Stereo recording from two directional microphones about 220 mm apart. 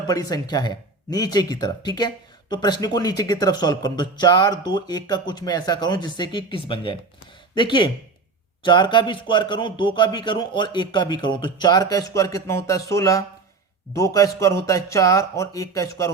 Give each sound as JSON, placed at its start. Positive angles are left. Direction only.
{"t": 0.1, "sound": "a man's voice", "side_deg": 15}